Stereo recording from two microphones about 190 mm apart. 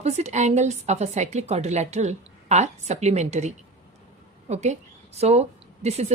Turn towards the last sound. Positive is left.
turn(degrees=-35)  # may be behind; listen again after turning